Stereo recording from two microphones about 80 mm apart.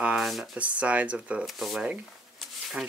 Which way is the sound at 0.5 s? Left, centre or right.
Centre.